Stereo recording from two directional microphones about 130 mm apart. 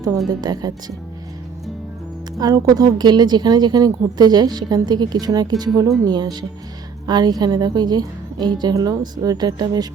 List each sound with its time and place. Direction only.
0.3 s a woman's voice: 30° right (ahead or behind)
2.4 s a woman's voice: 30° right (ahead or behind)